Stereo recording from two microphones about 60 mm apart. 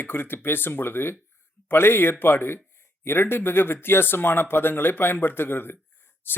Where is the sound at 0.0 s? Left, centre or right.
Left.